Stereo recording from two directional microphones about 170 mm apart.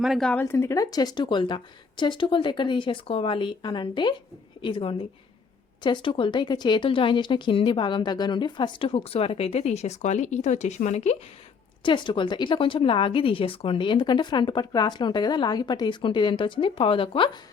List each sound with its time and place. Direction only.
0.0 s speech: centre (ahead or behind)
0.4 s speech: 15° left (ahead or behind); by 11.2 s 40° left (ahead or behind)
11.8 s speech: 30° left (ahead or behind)